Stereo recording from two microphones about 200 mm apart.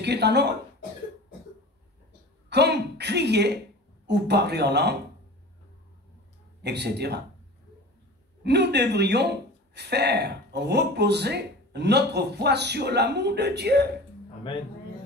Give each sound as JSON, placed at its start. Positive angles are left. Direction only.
{"t": 0.0, "sound": "speech", "side_deg": -55}
{"t": 2.5, "sound": "speech", "side_deg": -55}
{"t": 6.6, "sound": "speech", "side_deg": -55}
{"t": 8.5, "sound": "speech", "side_deg": -55}